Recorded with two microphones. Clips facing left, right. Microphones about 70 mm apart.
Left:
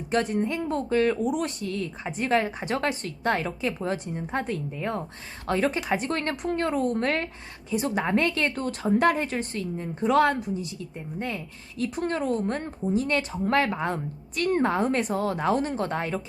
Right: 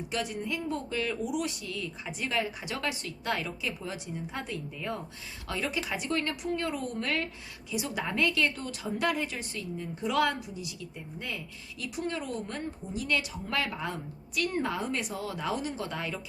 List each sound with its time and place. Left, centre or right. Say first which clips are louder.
0.1 s a woman's voice: left 9 dB; left